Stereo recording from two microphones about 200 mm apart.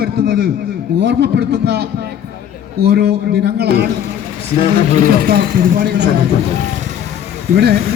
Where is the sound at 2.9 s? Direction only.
55° right (ahead or behind).